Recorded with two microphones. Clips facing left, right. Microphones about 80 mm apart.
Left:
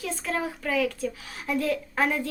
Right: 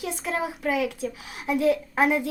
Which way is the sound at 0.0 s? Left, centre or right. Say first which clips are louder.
Right 1 dB; centre.